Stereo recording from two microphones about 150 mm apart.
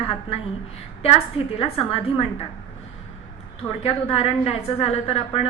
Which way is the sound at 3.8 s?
40° left (ahead or behind).